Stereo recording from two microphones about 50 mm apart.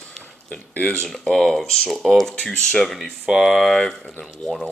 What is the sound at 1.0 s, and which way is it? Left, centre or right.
Speech, centre.